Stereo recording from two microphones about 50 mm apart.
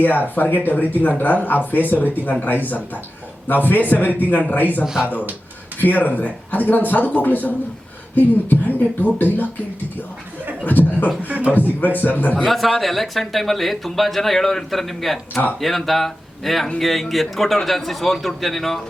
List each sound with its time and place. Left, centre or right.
0.0 s speech: left
5.8 s speech: left
10.6 s speech: left
11.3 s a man's voice: right
11.8 s speech: left
12.5 s speech: centre